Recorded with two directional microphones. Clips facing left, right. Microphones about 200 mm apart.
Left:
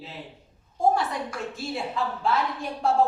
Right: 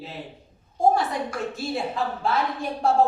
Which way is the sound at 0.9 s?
40° right (ahead or behind).